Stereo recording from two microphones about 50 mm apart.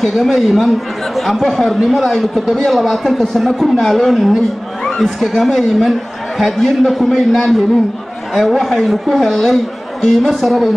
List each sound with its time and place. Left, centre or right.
0.0 s speech: centre
4.8 s a sound: centre
5.2 s speech: centre